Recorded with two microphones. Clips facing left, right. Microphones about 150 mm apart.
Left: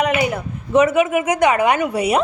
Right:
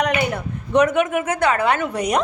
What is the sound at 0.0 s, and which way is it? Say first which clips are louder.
A woman's voice: left 2 dB; 5° left (ahead or behind).